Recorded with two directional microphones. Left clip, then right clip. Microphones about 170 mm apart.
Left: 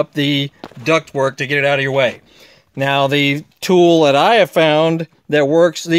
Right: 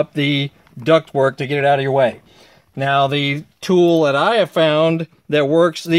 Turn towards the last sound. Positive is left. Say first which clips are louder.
# left 2 dB
turn(degrees=30)  # may be behind; listen again after turning